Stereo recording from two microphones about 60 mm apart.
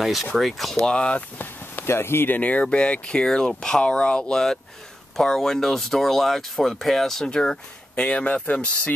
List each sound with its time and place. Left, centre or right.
0.0 s speech: centre
0.8 s speech: centre
1.4 s speech: left